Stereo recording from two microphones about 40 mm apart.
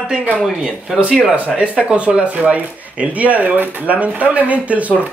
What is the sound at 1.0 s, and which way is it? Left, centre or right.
Speech, right.